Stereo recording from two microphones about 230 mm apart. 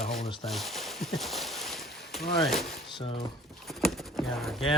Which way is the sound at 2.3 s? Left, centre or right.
Centre.